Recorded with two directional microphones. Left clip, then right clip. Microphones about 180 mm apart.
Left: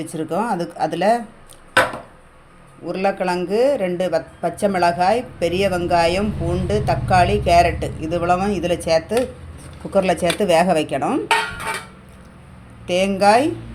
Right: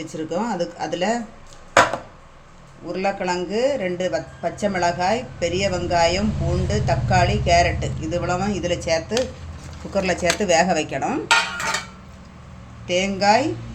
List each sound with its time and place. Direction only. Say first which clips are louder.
0.0 s speech: left 3 dB; 40° left (ahead or behind)
2.8 s speech: left 3 dB; 45° left (ahead or behind)
12.9 s speech: left 3 dB; 40° left (ahead or behind)